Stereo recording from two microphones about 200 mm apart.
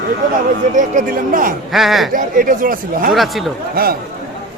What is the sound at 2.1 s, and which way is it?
Speech, 45° right (ahead or behind).